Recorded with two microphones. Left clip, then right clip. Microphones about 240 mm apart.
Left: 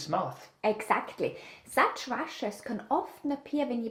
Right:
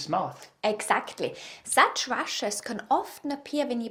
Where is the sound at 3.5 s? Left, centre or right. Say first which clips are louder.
Right 3 dB; right.